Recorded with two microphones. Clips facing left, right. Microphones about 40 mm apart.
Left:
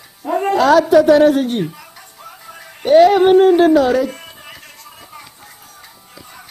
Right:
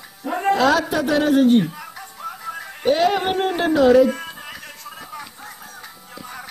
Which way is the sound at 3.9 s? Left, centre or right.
Centre.